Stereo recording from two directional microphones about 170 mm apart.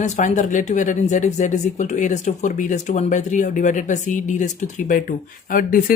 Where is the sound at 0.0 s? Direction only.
45° left (ahead or behind).